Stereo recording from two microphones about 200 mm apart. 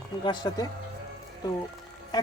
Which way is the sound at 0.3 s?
20° left (ahead or behind).